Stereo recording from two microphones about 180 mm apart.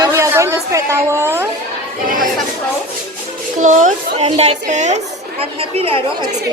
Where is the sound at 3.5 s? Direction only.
45° right (ahead or behind).